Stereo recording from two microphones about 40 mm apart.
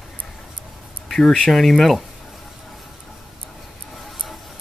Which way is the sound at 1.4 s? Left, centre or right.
Centre.